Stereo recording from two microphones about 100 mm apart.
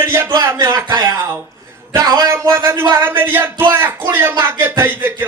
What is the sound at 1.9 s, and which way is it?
Speech, 40° right (ahead or behind).